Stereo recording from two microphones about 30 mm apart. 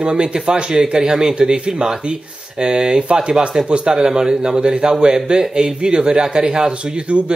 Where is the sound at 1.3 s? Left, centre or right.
Right.